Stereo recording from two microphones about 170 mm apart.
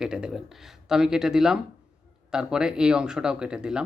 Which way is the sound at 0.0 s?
5° right (ahead or behind).